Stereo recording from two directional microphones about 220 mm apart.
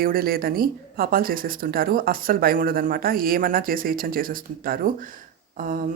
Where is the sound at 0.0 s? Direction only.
40° right (ahead or behind).